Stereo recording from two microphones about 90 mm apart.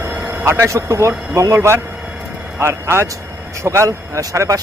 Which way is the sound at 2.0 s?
10° right (ahead or behind).